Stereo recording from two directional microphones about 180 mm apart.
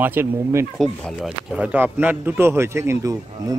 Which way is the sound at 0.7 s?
Centre (ahead or behind).